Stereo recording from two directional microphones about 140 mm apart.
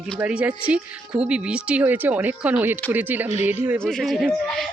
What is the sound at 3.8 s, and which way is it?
Speech, 5° left (ahead or behind).